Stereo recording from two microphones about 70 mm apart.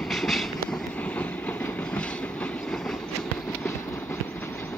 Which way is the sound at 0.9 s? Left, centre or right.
Left.